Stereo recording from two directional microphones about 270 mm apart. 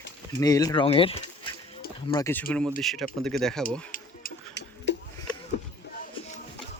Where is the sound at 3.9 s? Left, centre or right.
Left.